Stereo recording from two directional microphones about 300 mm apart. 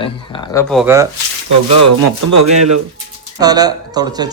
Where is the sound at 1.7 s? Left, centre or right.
Right.